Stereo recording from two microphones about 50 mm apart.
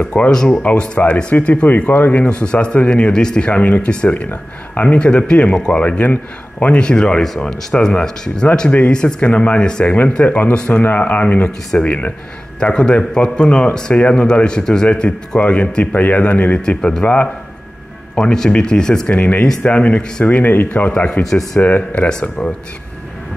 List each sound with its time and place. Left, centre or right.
0.3 s speech: centre
8.5 s speech: left
9.8 s speech: left
12.5 s speech: centre
16.6 s speech: centre
17.0 s speech: left
18.1 s speech: centre
19.1 s speech: left
22.4 s speech: centre